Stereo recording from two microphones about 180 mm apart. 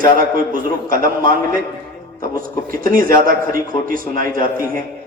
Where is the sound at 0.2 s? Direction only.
50° right (ahead or behind).